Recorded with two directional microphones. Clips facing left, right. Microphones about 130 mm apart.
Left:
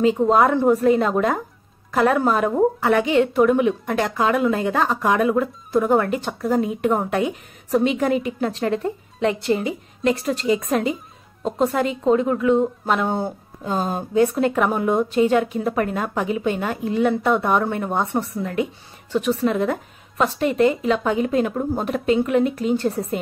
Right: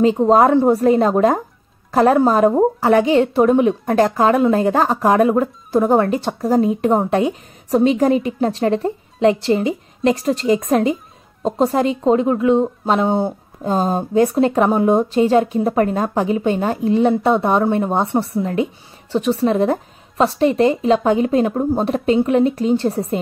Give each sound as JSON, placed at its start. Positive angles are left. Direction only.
{"t": 0.0, "sound": "a woman's voice", "side_deg": -35}